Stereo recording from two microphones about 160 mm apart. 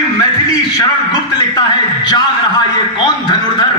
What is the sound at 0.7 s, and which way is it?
A man's voice, 25° left (ahead or behind).